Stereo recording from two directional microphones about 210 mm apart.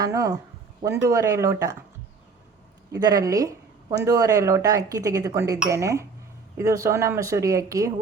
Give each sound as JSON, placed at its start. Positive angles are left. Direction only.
{"t": 0.0, "sound": "speech", "side_deg": -15}
{"t": 2.9, "sound": "speech", "side_deg": -15}